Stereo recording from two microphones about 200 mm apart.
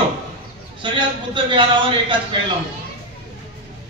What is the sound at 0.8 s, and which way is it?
Speech, 25° right (ahead or behind).